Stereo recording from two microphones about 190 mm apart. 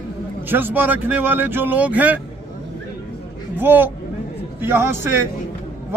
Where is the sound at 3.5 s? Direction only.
10° right (ahead or behind).